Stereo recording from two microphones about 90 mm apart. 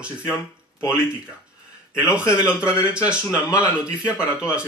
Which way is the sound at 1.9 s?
15° right (ahead or behind).